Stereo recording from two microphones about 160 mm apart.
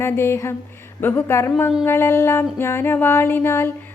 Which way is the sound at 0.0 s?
15° left (ahead or behind).